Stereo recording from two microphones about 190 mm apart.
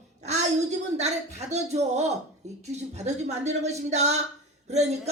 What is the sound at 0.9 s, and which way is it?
Speech, 35° right (ahead or behind).